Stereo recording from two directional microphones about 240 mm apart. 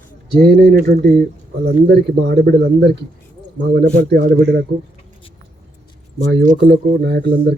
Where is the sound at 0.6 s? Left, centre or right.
Right.